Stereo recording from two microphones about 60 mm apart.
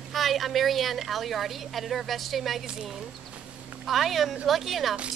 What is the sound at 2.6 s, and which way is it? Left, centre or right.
Speech, centre.